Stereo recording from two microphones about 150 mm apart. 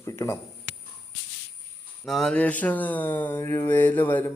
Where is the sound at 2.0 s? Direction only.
Centre (ahead or behind).